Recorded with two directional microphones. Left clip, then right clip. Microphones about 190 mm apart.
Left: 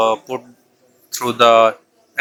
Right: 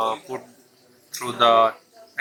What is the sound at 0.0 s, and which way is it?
Speech, 35° left (ahead or behind).